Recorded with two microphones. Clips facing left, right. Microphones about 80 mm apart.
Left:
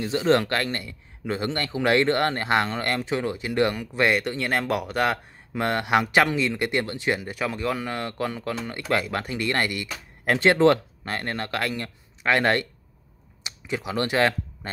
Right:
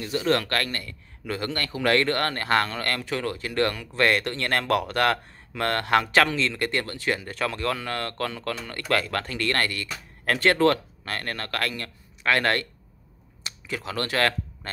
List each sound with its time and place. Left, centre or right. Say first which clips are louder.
0.0 s a man's voice: left 3 dB; left